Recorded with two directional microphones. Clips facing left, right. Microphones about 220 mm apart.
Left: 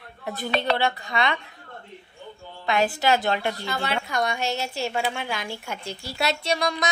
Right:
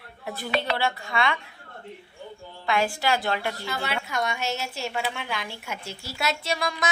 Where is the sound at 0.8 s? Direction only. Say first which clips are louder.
Left 1 dB; 20° left (ahead or behind).